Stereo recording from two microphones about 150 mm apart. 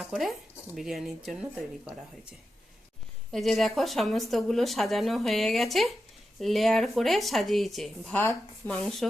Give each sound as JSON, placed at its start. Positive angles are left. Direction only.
{"t": 0.0, "sound": "speech", "side_deg": 0}
{"t": 3.3, "sound": "speech", "side_deg": 0}
{"t": 8.2, "sound": "speech", "side_deg": 10}